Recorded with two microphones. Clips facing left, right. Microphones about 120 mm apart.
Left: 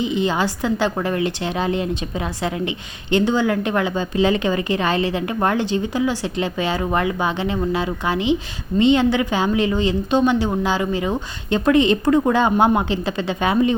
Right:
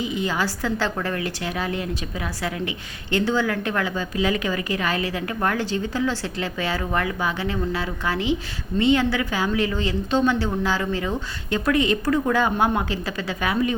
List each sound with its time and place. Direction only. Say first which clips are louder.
0.0 s a woman's voice: left 5 dB; 25° left (ahead or behind)